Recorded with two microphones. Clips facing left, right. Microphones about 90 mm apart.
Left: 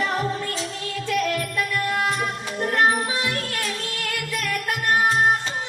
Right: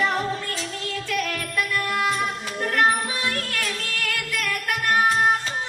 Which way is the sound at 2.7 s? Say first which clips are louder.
Left 1 dB; 25° left (ahead or behind).